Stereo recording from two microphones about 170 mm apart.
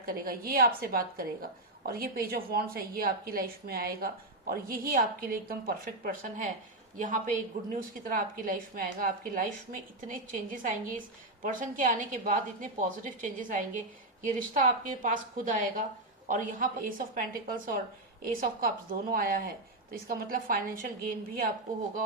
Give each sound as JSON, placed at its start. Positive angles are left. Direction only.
{"t": 0.0, "sound": "a woman's voice", "side_deg": -60}